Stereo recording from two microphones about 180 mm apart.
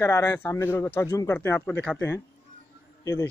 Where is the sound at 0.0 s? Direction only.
15° left (ahead or behind).